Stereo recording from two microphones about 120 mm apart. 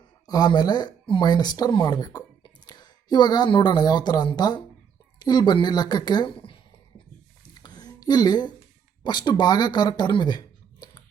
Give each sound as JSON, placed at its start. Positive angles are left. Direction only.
{"t": 0.3, "sound": "a woman's voice", "side_deg": 35}
{"t": 7.6, "sound": "a sound", "side_deg": 35}
{"t": 9.0, "sound": "speech", "side_deg": 35}